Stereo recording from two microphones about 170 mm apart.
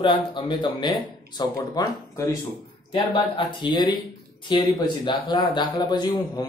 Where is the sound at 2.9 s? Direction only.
30° left (ahead or behind).